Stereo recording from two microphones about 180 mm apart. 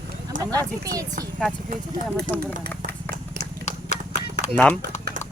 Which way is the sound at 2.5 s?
45° right (ahead or behind).